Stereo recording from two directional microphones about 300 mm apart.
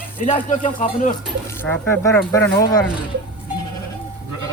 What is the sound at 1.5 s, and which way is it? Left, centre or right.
Speech, centre.